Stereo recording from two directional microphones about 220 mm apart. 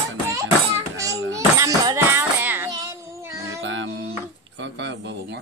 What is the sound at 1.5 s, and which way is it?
Child singing, 15° right (ahead or behind).